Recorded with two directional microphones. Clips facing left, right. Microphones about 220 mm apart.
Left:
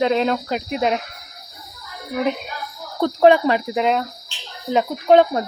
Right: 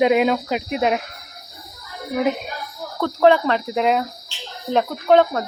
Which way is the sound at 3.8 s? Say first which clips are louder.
Even; 5° right (ahead or behind).